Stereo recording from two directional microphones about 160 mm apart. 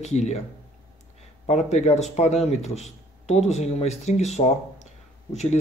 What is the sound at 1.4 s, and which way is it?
Speech, 45° left (ahead or behind).